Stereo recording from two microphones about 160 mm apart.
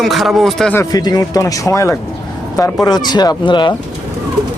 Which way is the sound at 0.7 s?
20° left (ahead or behind).